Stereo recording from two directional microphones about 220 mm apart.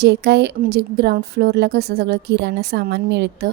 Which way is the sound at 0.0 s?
50° right (ahead or behind).